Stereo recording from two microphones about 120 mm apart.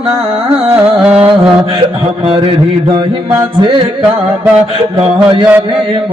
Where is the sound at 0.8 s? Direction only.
10° right (ahead or behind).